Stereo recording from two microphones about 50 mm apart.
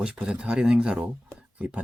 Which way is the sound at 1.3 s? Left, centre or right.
Right.